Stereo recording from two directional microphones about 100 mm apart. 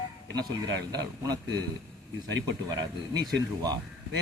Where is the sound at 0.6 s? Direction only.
40° right (ahead or behind).